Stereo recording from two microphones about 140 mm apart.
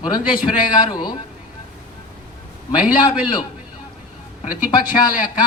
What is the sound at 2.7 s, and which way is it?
Speech, 30° left (ahead or behind).